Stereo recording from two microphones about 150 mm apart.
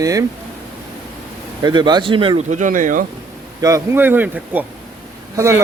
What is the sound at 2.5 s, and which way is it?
Speech, 60° right (ahead or behind).